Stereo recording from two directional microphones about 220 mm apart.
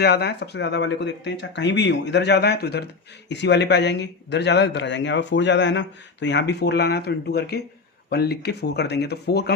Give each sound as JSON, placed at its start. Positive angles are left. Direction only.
{"t": 0.0, "sound": "speech", "side_deg": 45}